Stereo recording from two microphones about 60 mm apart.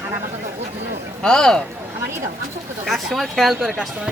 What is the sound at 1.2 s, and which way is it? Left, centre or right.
Speech, centre.